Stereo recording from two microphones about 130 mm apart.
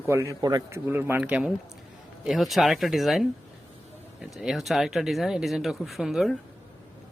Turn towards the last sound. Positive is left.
turn(degrees=0)  # may be behind; listen again after turning